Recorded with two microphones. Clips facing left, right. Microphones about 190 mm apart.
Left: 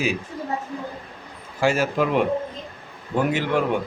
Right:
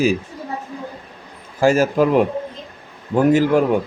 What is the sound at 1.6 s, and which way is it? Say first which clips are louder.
Speech: right 6 dB; 45° right (ahead or behind).